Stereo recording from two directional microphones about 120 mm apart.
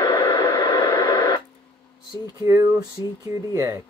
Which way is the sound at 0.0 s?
40° left (ahead or behind).